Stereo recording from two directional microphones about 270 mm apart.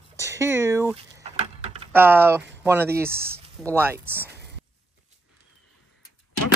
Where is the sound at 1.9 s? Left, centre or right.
Centre.